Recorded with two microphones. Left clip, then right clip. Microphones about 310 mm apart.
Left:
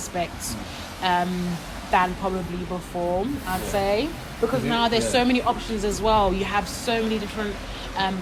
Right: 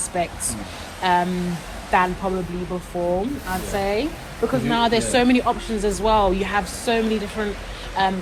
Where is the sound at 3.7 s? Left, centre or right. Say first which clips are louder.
Even; centre.